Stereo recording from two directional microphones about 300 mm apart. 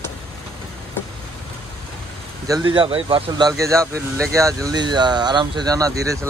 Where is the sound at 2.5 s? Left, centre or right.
Centre.